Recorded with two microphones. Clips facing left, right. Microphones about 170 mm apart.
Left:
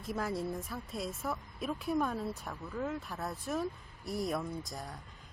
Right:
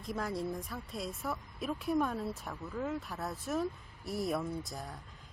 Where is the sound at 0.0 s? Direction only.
5° left (ahead or behind).